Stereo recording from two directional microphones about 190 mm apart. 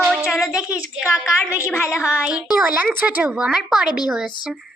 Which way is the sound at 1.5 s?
15° left (ahead or behind).